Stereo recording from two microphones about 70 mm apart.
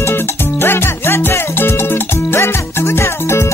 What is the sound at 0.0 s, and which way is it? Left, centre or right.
Music, left.